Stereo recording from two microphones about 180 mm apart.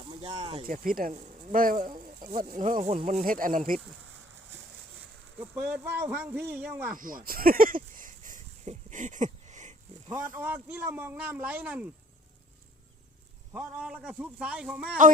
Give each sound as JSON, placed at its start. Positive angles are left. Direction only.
{"t": 0.0, "sound": "a sound", "side_deg": -35}
{"t": 0.6, "sound": "speech", "side_deg": -50}
{"t": 5.5, "sound": "speech", "side_deg": -10}
{"t": 6.9, "sound": "a sound", "side_deg": -50}
{"t": 10.2, "sound": "speech", "side_deg": -15}
{"t": 13.5, "sound": "speech", "side_deg": -5}